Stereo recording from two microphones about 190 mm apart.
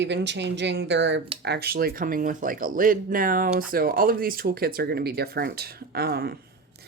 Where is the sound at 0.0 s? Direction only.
70° right (ahead or behind).